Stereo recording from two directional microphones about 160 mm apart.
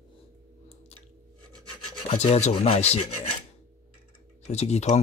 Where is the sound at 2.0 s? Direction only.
40° left (ahead or behind).